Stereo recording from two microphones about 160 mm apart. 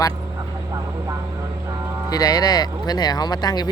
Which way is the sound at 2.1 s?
25° left (ahead or behind).